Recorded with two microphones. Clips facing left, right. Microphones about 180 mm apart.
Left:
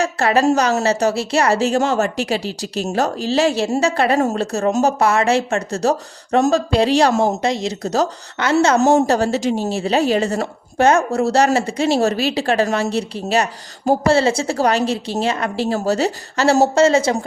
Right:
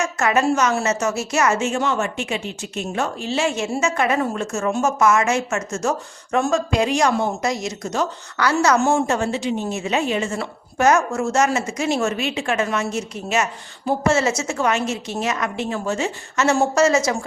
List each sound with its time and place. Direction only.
0.0 s a woman's voice: 30° left (ahead or behind)